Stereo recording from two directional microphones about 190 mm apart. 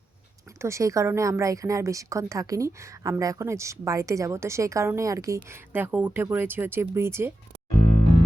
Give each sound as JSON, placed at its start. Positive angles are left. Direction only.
{"t": 0.6, "sound": "a woman's voice", "side_deg": -15}